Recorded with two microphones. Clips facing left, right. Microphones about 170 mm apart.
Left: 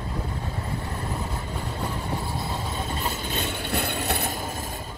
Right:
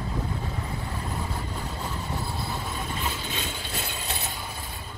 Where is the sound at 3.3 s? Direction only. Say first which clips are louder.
Left 5 dB; 55° left (ahead or behind).